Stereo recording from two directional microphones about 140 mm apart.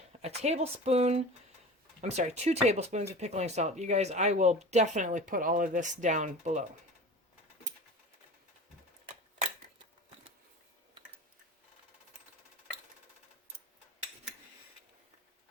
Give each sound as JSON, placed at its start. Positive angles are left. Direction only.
{"t": 0.2, "sound": "speech", "side_deg": -50}